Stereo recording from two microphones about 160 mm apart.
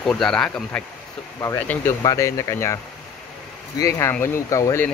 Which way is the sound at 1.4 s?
15° left (ahead or behind).